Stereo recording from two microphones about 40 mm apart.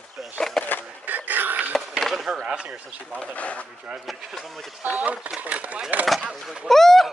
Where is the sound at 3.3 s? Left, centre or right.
Left.